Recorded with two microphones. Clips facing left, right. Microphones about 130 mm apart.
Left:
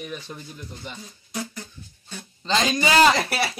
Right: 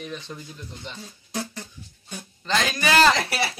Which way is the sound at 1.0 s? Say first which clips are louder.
Right 2 dB; 30° right (ahead or behind).